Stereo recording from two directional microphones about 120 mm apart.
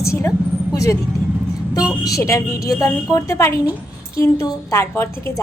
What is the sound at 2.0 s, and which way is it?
A woman's voice, 25° left (ahead or behind).